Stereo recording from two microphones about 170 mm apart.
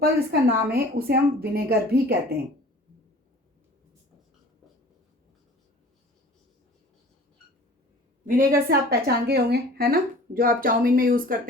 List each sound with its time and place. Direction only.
0.0 s a woman's voice: 65° right (ahead or behind)
8.3 s a woman's voice: 60° right (ahead or behind)